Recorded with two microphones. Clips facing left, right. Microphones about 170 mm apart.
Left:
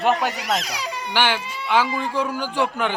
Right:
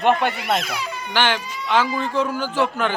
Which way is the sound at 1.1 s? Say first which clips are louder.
Right 1 dB; 10° left (ahead or behind).